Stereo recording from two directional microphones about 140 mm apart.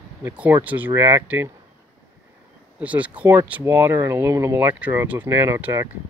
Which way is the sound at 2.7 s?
10° right (ahead or behind).